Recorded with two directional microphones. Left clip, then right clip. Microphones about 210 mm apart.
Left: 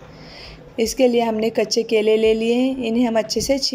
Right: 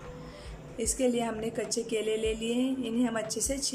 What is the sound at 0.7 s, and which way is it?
A woman's voice, 25° left (ahead or behind).